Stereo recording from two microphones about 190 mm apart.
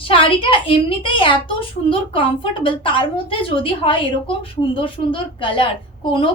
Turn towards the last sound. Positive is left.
turn(degrees=30)  # may be behind; listen again after turning